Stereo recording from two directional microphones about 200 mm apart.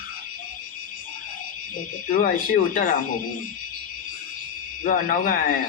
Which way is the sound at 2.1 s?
45° left (ahead or behind).